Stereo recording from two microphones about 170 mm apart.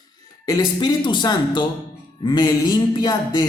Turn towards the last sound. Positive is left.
turn(degrees=25)  # may be behind; listen again after turning